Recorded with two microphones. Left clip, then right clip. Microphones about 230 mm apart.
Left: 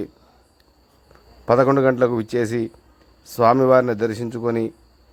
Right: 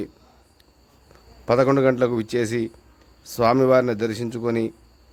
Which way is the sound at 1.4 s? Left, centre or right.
Centre.